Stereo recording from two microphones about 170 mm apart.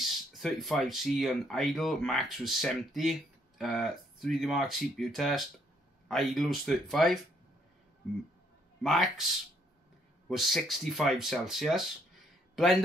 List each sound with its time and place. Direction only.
0.0 s speech: centre (ahead or behind)
8.8 s speech: centre (ahead or behind)
10.2 s speech: centre (ahead or behind)